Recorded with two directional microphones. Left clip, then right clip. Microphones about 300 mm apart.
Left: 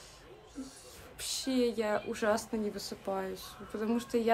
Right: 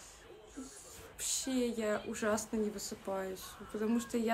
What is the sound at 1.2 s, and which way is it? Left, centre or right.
Speech, centre.